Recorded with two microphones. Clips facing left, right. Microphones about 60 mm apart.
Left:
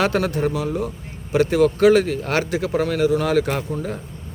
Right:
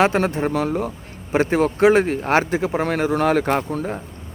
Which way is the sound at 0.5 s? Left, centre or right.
Right.